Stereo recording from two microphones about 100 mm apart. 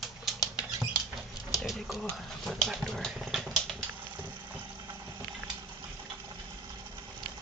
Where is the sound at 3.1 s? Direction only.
5° right (ahead or behind).